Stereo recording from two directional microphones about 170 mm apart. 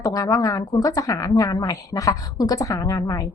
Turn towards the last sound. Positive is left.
turn(degrees=20)  # may be behind; listen again after turning